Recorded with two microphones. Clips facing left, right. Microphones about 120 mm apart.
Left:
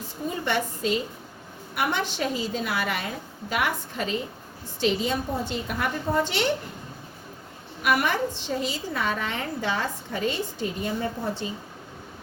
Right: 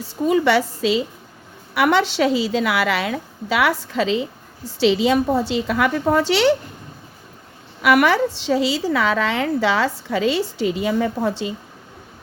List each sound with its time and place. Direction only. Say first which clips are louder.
0.0 s a woman's voice: right 13 dB; 90° right
7.8 s a woman's voice: right 8 dB; 90° right